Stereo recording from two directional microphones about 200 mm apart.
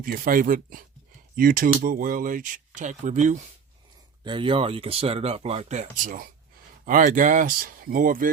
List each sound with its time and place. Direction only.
0.0 s speech: 45° right (ahead or behind)
4.2 s speech: 25° right (ahead or behind); by 8.3 s 45° right (ahead or behind)